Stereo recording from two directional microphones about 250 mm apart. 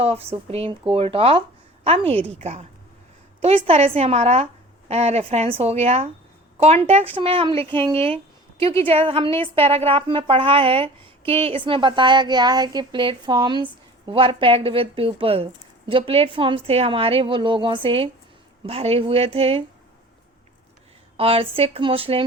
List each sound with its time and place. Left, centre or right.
0.0 s a woman's voice: right
21.2 s a woman's voice: right